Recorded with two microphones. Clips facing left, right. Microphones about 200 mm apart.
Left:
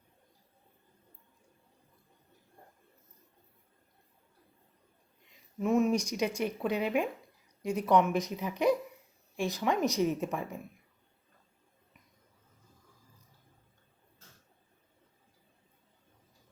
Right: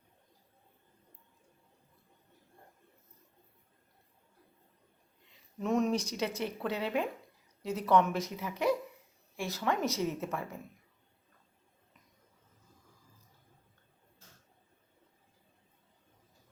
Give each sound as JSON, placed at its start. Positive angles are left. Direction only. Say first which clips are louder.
{"t": 5.5, "sound": "speech", "louder": "left 3 dB", "side_deg": 5}